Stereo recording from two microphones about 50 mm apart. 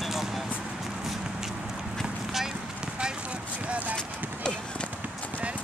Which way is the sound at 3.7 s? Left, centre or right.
Right.